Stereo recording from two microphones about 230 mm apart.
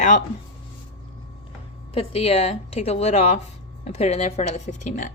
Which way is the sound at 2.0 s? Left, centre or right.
Left.